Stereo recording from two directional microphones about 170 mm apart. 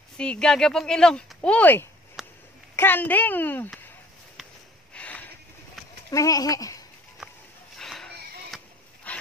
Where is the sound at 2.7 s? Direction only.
10° left (ahead or behind).